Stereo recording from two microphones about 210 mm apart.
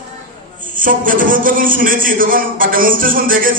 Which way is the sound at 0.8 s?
40° right (ahead or behind).